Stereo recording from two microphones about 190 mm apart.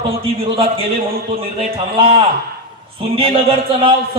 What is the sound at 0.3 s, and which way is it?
Speech, 30° right (ahead or behind).